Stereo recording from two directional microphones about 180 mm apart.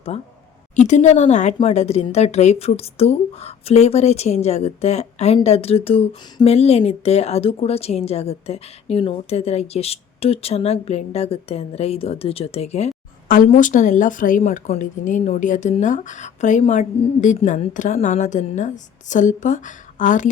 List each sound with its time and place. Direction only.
0.1 s a woman's voice: 35° left (ahead or behind)
13.2 s a woman's voice: 50° left (ahead or behind)